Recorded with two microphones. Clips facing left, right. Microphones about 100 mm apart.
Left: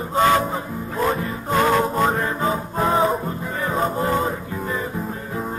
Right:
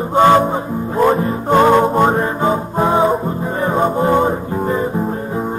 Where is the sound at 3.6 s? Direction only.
35° right (ahead or behind).